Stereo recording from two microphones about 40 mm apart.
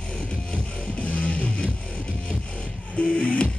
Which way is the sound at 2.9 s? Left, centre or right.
Left.